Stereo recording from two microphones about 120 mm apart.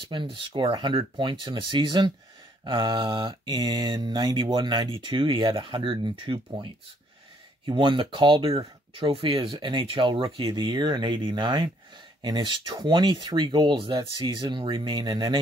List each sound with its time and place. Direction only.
0.1 s speech: 45° right (ahead or behind)
0.6 s mantra: 45° right (ahead or behind)
7.6 s speech: 45° right (ahead or behind)
12.2 s mantra: 40° right (ahead or behind)